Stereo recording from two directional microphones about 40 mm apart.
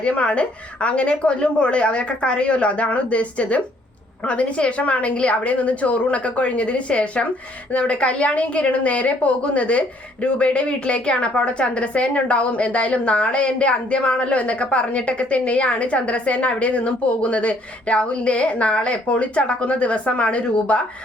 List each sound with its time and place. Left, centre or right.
0.0 s a woman's voice: left